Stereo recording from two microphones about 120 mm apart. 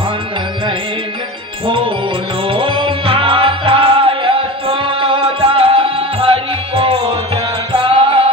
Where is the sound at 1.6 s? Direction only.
45° right (ahead or behind).